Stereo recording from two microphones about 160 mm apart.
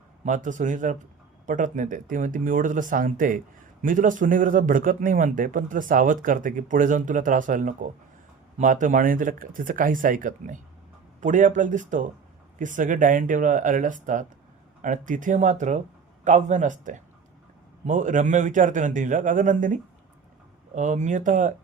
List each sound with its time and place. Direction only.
0.3 s a man's voice: 55° right (ahead or behind)